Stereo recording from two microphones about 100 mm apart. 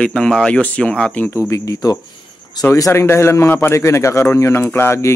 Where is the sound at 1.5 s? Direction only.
30° left (ahead or behind).